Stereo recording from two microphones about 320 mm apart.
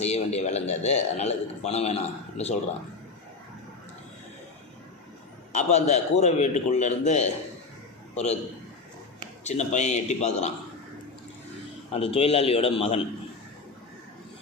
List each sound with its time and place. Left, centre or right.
0.0 s a man's voice: centre
5.5 s a man's voice: left
9.4 s a man's voice: left
11.9 s a man's voice: centre